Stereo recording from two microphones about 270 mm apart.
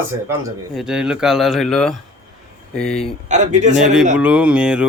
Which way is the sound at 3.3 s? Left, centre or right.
Right.